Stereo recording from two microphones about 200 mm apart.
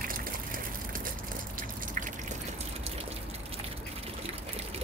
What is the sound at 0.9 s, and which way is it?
Water, 45° right (ahead or behind).